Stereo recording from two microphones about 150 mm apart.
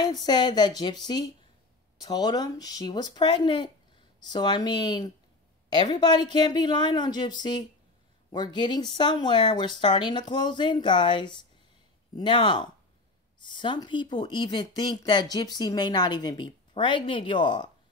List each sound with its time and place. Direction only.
0.0 s speech: 25° left (ahead or behind)